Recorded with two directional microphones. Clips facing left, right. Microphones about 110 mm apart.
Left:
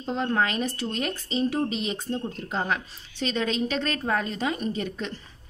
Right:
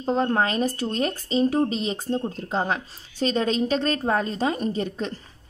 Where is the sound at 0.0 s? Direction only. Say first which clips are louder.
Right 3 dB; 40° right (ahead or behind).